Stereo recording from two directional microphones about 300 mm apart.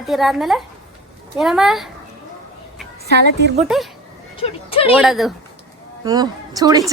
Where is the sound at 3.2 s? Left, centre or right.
Right.